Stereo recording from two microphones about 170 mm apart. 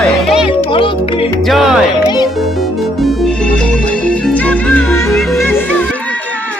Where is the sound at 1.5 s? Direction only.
Centre (ahead or behind).